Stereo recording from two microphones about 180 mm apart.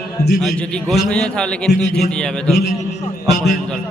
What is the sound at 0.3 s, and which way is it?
A man's voice, centre (ahead or behind).